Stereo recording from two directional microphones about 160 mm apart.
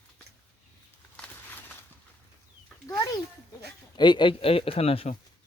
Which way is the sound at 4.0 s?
30° left (ahead or behind).